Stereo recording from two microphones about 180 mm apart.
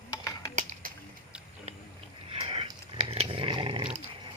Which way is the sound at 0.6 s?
45° right (ahead or behind).